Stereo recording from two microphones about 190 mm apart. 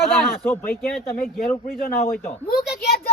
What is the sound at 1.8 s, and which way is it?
Speech, 50° left (ahead or behind).